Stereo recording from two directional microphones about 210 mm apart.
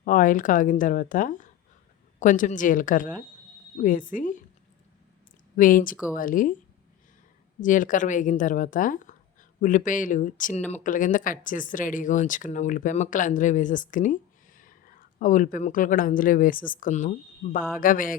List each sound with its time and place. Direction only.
0.0 s speech: 40° left (ahead or behind)
5.5 s speech: 40° left (ahead or behind)
7.6 s speech: 40° left (ahead or behind)